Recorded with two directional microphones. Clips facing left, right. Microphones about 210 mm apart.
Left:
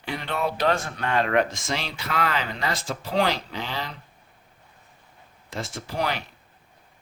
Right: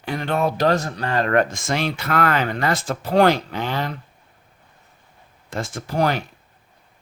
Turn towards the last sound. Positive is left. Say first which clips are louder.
# right 7 dB
turn(degrees=-50)  # may be behind; listen again after turning